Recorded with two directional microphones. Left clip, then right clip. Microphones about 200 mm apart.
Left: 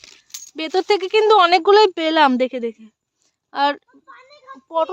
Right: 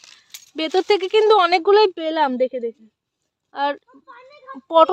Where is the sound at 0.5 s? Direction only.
10° right (ahead or behind); by 1.9 s 10° left (ahead or behind).